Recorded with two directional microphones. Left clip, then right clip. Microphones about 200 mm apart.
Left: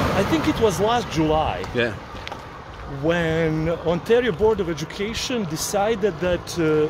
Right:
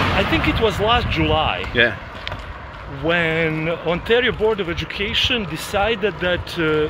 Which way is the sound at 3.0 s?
15° left (ahead or behind).